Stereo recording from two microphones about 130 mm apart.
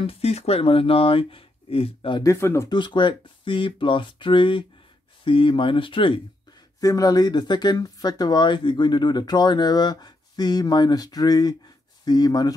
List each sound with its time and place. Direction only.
0.0 s speech: 50° left (ahead or behind)
2.2 s speech: 20° left (ahead or behind)
2.7 s speech: 40° left (ahead or behind)
6.8 s speech: 25° left (ahead or behind)